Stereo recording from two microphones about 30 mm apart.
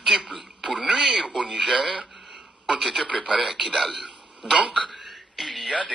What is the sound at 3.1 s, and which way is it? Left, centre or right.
Speech, right.